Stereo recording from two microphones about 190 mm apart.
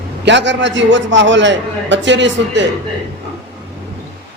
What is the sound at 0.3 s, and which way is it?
A man's voice, 70° right (ahead or behind).